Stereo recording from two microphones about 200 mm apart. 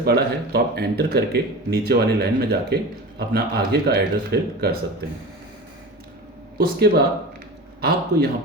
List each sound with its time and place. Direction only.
0.0 s speech: 50° right (ahead or behind)
6.6 s speech: 50° right (ahead or behind)